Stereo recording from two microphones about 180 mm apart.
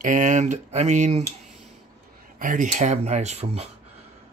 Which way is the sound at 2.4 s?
45° right (ahead or behind).